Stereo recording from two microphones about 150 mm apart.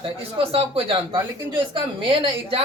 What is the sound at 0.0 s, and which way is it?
A woman's voice, 40° right (ahead or behind).